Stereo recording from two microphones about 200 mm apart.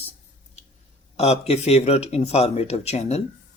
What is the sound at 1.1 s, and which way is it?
Speech, 30° left (ahead or behind).